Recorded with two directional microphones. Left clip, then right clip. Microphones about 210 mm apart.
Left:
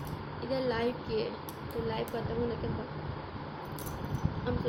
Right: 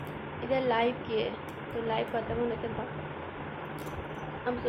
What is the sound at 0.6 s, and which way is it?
Speech, 20° left (ahead or behind).